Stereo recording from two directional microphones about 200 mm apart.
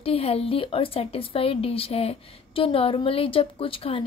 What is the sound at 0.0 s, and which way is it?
Speech, 30° left (ahead or behind).